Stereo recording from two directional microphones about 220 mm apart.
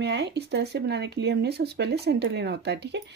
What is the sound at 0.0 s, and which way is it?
A woman's voice, 50° right (ahead or behind).